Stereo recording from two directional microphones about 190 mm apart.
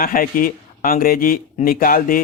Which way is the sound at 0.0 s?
50° left (ahead or behind).